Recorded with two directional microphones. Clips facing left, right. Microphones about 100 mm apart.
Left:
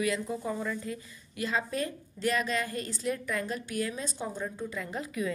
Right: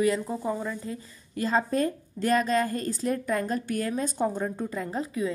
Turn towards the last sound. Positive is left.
turn(degrees=-30)  # may be behind; listen again after turning